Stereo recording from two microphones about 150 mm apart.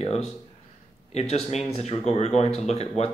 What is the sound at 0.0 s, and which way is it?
Speech, 45° left (ahead or behind).